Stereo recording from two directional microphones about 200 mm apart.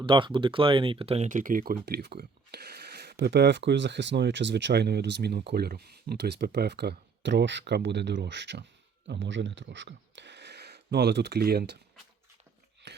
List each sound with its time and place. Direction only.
0.0 s speech: 25° right (ahead or behind); by 11.8 s 55° right (ahead or behind)